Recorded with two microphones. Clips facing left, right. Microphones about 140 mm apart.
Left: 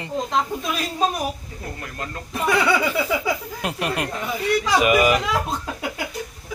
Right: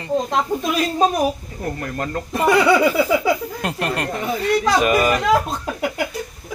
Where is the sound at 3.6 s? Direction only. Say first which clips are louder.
Right 1 dB; 5° left (ahead or behind).